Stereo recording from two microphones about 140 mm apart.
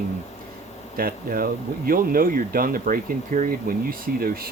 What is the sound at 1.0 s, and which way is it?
Speech, 90° right.